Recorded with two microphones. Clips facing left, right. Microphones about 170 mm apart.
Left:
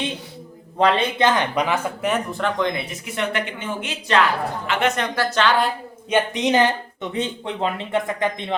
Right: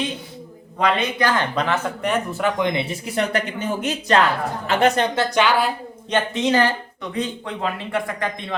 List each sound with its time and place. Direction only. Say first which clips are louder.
0.8 s speech: left 2 dB; 30° left (ahead or behind); by 2.5 s centre (ahead or behind)
2.6 s speech: right 2 dB; 20° right (ahead or behind)
5.1 s a woman's voice: right 1 dB; 15° right (ahead or behind)
6.1 s speech: left 1 dB; 15° left (ahead or behind)